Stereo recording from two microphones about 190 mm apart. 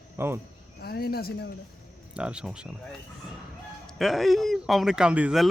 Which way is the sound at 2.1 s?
5° right (ahead or behind).